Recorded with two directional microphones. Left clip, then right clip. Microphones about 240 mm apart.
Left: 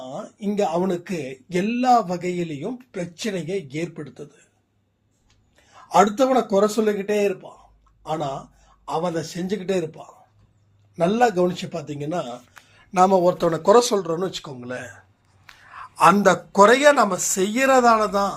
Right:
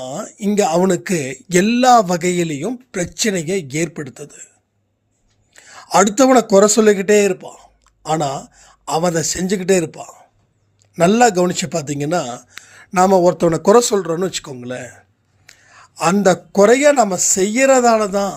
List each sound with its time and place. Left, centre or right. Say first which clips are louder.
0.0 s a man's voice: right 7 dB; right
5.5 s a man's voice: right 3 dB; right
15.4 s a sound: left 4 dB; right
16.6 s a man's voice: right 3 dB; right